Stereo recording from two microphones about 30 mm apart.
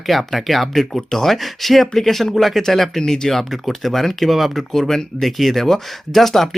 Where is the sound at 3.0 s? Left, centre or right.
Centre.